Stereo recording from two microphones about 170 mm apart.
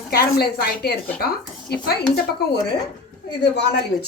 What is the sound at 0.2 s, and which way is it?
Speech, 70° left (ahead or behind).